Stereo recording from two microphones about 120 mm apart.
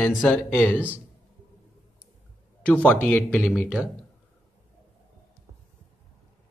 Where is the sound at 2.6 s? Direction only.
10° left (ahead or behind).